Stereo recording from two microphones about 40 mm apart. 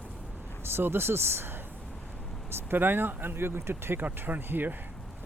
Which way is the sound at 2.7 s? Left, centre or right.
Right.